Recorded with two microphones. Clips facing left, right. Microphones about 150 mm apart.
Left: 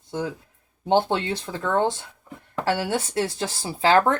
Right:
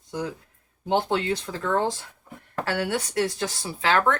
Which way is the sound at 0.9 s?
30° left (ahead or behind).